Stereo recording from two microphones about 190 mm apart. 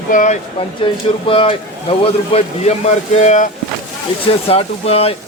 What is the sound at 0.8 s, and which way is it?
Speech, 25° left (ahead or behind).